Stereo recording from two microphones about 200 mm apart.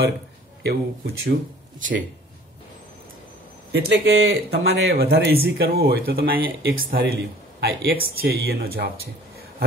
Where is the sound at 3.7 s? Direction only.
70° right (ahead or behind).